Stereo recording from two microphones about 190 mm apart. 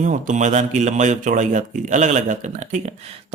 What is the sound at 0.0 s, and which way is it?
Speech, 40° right (ahead or behind).